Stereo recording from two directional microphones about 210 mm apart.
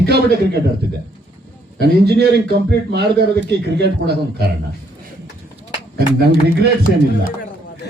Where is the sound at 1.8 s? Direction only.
50° right (ahead or behind).